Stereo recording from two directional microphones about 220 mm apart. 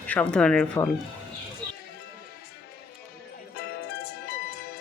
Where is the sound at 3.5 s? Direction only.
45° left (ahead or behind).